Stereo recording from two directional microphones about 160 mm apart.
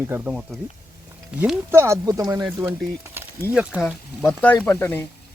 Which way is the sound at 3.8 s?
Centre (ahead or behind).